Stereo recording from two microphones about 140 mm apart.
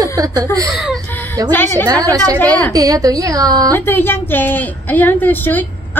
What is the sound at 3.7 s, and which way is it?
A woman's voice, 15° left (ahead or behind).